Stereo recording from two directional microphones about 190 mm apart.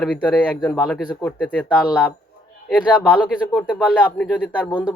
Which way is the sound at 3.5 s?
5° left (ahead or behind).